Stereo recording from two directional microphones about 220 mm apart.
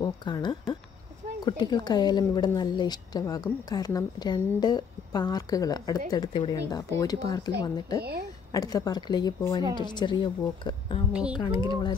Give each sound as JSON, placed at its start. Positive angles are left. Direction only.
{"t": 0.0, "sound": "speech", "side_deg": 20}
{"t": 8.0, "sound": "speech", "side_deg": -45}
{"t": 8.5, "sound": "speech", "side_deg": 15}